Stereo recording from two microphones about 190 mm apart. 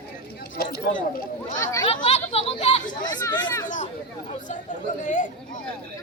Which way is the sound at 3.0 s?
20° left (ahead or behind).